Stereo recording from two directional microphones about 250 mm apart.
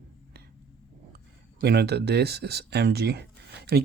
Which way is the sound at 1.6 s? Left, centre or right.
Right.